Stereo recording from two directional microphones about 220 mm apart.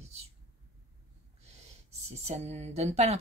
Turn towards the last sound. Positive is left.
turn(degrees=-30)  # may be behind; listen again after turning